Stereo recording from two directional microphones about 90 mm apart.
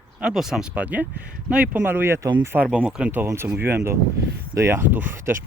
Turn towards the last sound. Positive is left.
turn(degrees=-25)  # may be behind; listen again after turning